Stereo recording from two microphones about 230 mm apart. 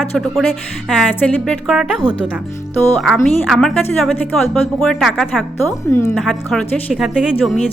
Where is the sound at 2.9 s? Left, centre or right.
Centre.